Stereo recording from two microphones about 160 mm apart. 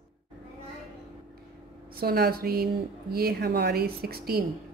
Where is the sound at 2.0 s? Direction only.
75° right (ahead or behind).